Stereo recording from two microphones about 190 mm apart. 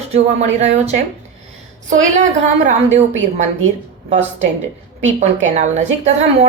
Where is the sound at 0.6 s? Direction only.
35° right (ahead or behind).